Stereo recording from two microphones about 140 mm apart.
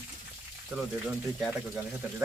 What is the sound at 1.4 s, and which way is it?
Speech, centre (ahead or behind).